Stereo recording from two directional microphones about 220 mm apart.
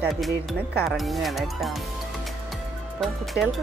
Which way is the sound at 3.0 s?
Centre (ahead or behind).